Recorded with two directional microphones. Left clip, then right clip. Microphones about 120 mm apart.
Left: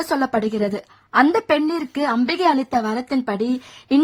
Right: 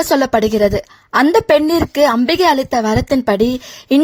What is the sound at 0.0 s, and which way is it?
A woman's voice, 30° right (ahead or behind).